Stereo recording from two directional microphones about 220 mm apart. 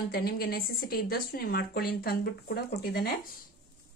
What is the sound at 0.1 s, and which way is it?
A woman's voice, 45° left (ahead or behind).